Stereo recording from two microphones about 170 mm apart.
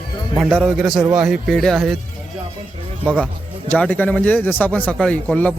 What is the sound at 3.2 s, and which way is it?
A man's voice, 5° left (ahead or behind).